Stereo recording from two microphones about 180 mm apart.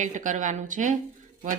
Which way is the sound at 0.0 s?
45° right (ahead or behind).